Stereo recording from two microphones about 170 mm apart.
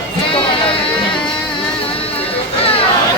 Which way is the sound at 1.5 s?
35° left (ahead or behind).